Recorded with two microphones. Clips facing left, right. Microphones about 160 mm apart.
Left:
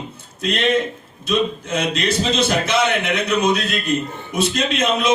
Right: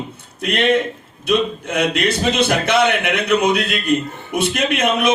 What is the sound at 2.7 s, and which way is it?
A man's voice, 60° right (ahead or behind).